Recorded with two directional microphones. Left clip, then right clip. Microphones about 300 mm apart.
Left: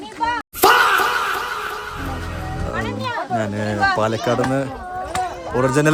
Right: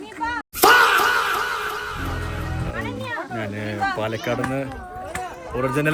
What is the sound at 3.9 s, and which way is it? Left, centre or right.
Speech, centre.